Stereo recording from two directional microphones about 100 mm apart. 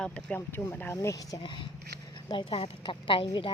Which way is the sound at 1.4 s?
50° left (ahead or behind).